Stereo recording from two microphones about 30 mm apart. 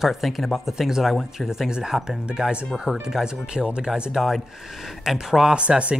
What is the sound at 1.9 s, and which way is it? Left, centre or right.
Speech, centre.